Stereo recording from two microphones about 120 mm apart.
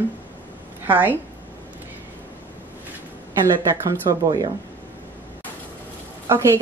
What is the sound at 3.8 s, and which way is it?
Speech, 30° right (ahead or behind).